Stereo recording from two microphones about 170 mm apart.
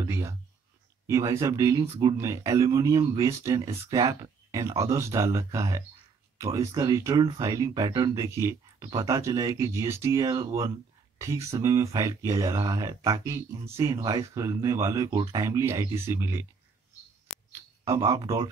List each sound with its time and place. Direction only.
0.0 s a sound: 20° right (ahead or behind)
1.0 s speech: 15° right (ahead or behind)
17.8 s speech: 20° right (ahead or behind)